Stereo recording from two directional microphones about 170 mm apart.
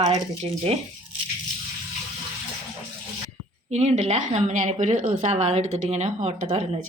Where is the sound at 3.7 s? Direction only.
40° right (ahead or behind).